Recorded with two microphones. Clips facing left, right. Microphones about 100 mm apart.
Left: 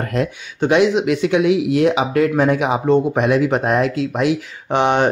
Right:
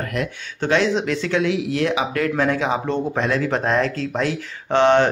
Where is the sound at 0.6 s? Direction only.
15° left (ahead or behind).